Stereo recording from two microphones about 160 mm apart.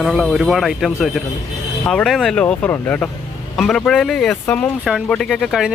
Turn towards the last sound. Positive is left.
turn(degrees=0)  # may be behind; listen again after turning